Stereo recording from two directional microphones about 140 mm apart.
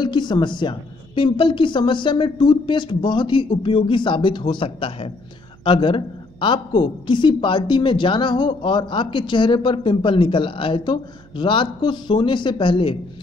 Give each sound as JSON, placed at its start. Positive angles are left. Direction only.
{"t": 0.0, "sound": "a woman's voice", "side_deg": 30}